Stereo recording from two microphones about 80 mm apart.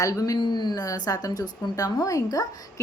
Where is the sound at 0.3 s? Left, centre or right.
Left.